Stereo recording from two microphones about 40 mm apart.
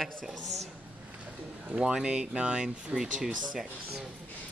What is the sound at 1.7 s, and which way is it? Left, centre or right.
Speech, right.